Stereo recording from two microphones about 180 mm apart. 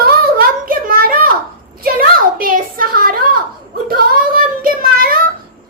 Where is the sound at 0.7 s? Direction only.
55° right (ahead or behind).